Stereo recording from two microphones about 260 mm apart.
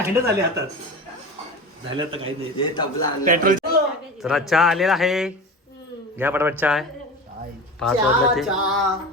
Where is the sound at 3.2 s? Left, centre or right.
Right.